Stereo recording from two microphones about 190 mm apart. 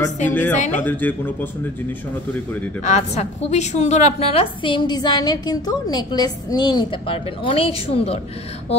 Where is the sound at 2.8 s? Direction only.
35° left (ahead or behind).